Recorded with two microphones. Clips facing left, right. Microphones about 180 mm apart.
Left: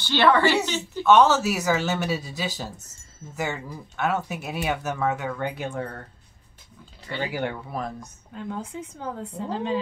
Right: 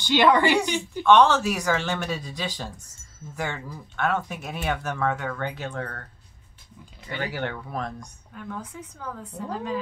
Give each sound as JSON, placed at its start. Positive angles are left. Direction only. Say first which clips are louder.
{"t": 0.0, "sound": "a woman's voice", "louder": "even", "side_deg": -15}
{"t": 1.0, "sound": "speech", "louder": "even", "side_deg": 5}
{"t": 7.2, "sound": "speech", "louder": "left 2 dB", "side_deg": 10}
{"t": 8.3, "sound": "a woman's voice", "louder": "left 4 dB", "side_deg": 25}